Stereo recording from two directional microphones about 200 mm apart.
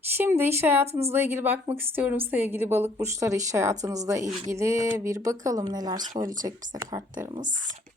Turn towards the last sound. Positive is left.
turn(degrees=-20)  # may be behind; listen again after turning